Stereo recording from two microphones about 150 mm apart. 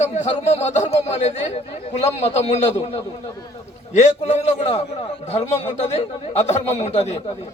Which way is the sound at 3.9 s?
50° left (ahead or behind).